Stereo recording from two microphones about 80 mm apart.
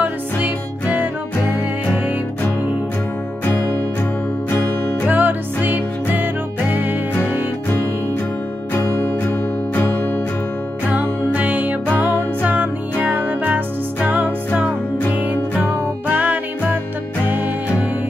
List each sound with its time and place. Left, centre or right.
0.0 s music: right
4.5 s music: left
5.0 s music: right
8.8 s music: left
10.9 s music: centre
16.1 s music: right